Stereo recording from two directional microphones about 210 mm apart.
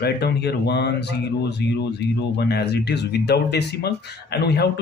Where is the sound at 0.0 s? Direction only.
50° left (ahead or behind).